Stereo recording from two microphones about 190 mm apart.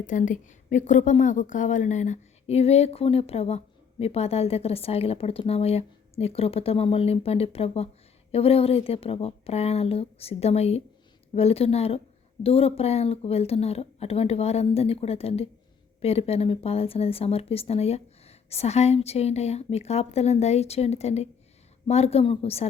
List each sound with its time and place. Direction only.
0.0 s speech: 40° left (ahead or behind)